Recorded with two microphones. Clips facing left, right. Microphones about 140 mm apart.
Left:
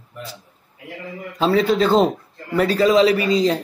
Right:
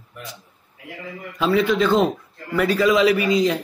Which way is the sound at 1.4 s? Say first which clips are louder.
Left 2 dB; 35° left (ahead or behind).